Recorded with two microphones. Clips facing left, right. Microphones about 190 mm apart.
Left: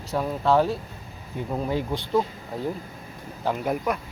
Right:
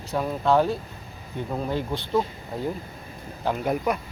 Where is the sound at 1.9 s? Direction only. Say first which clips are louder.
Even; 15° left (ahead or behind).